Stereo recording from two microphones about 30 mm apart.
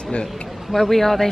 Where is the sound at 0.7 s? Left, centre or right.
Centre.